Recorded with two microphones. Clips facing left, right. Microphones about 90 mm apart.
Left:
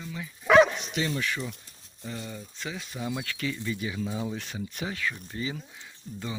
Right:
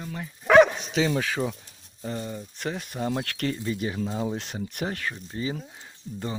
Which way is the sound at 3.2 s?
60° right (ahead or behind).